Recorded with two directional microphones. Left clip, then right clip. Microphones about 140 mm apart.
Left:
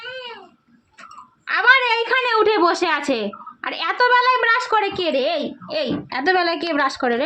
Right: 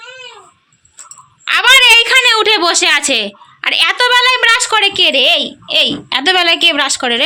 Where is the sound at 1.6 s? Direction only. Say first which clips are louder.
Right 9 dB; 10° right (ahead or behind).